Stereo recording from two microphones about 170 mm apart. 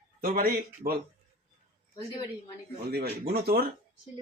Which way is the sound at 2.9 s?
65° right (ahead or behind).